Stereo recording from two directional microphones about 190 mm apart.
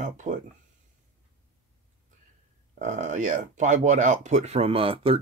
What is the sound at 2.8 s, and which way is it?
Speech, 40° right (ahead or behind).